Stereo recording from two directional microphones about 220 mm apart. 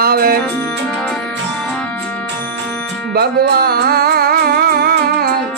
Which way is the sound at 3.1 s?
45° right (ahead or behind).